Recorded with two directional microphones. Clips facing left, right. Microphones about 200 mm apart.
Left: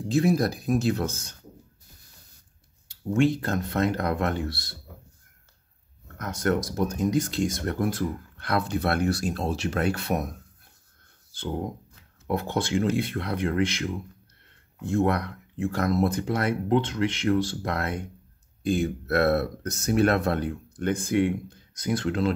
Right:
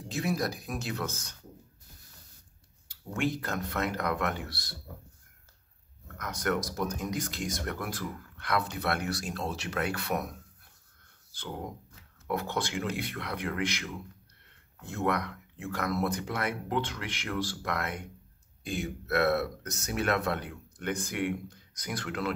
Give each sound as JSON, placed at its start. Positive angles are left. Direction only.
{"t": 0.1, "sound": "speech", "side_deg": 30}
{"t": 2.9, "sound": "speech", "side_deg": 25}
{"t": 6.1, "sound": "speech", "side_deg": 30}
{"t": 12.3, "sound": "speech", "side_deg": 25}